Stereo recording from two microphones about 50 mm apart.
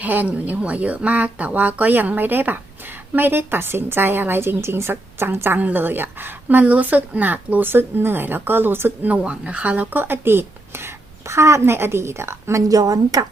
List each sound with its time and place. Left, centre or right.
0.0 s a woman's voice: right
5.5 s a woman's voice: right
9.1 s speech: right
9.9 s a woman's voice: right